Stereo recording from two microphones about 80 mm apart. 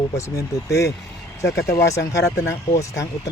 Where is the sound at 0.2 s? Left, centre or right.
Left.